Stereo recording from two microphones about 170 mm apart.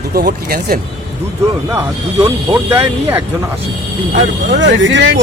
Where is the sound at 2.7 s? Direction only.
15° right (ahead or behind).